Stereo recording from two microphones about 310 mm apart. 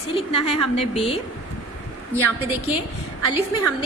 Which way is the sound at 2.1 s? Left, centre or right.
Centre.